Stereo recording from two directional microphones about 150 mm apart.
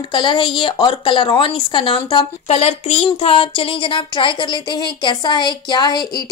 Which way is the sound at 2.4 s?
45° left (ahead or behind).